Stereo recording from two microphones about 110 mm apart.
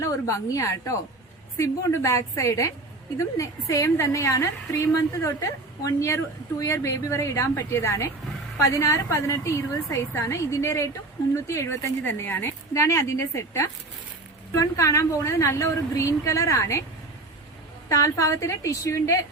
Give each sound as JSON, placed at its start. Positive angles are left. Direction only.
{"t": 0.0, "sound": "a woman's voice", "side_deg": 30}
{"t": 17.8, "sound": "a woman's voice", "side_deg": 30}